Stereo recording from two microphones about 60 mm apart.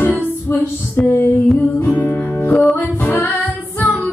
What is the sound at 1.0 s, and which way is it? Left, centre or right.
Music, left.